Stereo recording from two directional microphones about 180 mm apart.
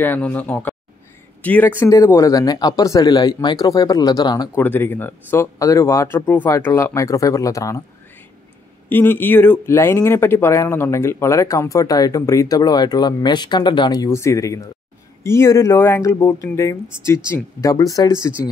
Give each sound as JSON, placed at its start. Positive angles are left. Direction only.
{"t": 0.0, "sound": "speech", "side_deg": 10}
{"t": 4.6, "sound": "speech", "side_deg": 10}
{"t": 8.8, "sound": "speech", "side_deg": 10}